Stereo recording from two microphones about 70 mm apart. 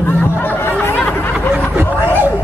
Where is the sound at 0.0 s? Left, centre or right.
Left.